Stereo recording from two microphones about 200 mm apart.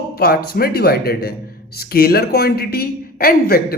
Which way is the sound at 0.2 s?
50° left (ahead or behind).